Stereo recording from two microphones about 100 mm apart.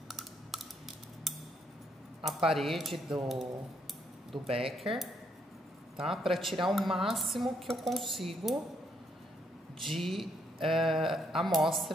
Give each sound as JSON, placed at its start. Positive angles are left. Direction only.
{"t": 2.2, "sound": "speech", "side_deg": 0}
{"t": 4.5, "sound": "speech", "side_deg": -75}
{"t": 4.7, "sound": "speech", "side_deg": 0}
{"t": 9.8, "sound": "speech", "side_deg": 0}